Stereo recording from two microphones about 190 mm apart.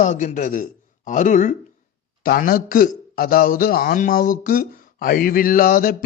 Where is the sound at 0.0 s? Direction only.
40° left (ahead or behind).